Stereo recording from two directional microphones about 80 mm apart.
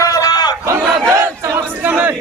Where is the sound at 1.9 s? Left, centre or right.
Centre.